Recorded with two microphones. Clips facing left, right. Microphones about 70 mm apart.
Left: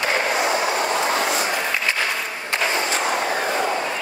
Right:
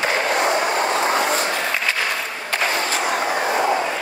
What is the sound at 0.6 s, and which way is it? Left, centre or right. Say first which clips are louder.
Vehicle: right 2 dB; right.